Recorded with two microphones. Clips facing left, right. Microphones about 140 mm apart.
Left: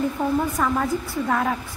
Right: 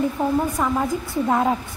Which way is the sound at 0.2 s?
15° right (ahead or behind).